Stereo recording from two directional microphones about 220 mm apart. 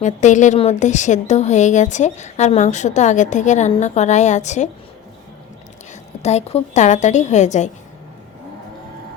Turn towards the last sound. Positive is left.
turn(degrees=35)  # may be behind; listen again after turning